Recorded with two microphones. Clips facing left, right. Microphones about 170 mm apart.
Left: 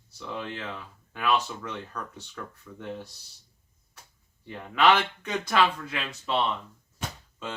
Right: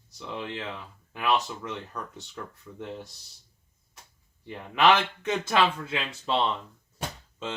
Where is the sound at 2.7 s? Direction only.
15° right (ahead or behind).